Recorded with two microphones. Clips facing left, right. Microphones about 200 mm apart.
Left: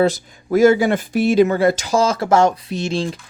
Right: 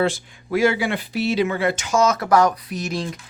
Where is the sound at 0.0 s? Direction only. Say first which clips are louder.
Left 5 dB; 40° left (ahead or behind).